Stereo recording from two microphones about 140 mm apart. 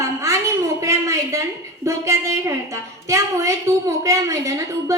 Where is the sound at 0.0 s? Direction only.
20° right (ahead or behind).